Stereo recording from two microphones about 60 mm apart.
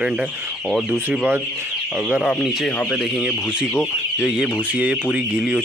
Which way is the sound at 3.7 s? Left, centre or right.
Left.